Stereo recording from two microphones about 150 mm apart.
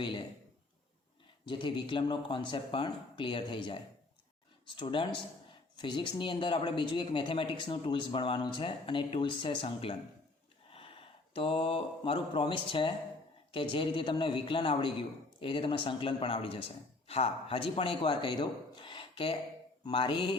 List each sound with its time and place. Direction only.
0.0 s a man's voice: 30° left (ahead or behind)
1.5 s a man's voice: 30° left (ahead or behind)
10.7 s a sound: 35° left (ahead or behind)
11.3 s a man's voice: 40° left (ahead or behind)